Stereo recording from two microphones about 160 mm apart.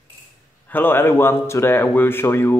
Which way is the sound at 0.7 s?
10° left (ahead or behind).